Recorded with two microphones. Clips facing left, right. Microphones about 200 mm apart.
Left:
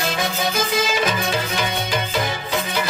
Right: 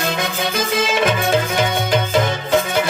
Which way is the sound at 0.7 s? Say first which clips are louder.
Right 6 dB; 55° right (ahead or behind).